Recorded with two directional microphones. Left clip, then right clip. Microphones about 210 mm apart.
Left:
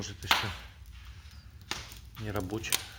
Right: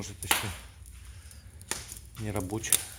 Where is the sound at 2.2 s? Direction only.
20° right (ahead or behind).